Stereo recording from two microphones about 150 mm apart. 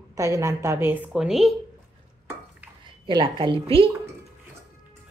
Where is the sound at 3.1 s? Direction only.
35° right (ahead or behind).